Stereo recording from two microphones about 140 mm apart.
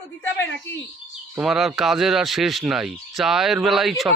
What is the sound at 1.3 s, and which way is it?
Speech, 5° right (ahead or behind).